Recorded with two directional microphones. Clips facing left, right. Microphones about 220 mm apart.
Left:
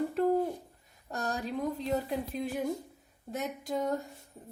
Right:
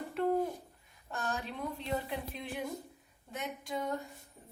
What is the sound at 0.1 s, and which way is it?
Owl, 40° left (ahead or behind).